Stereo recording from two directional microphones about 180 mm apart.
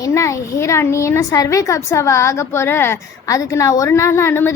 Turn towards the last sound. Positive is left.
turn(degrees=15)  # may be behind; listen again after turning